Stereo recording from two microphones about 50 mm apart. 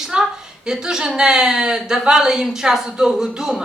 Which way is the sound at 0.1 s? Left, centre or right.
Centre.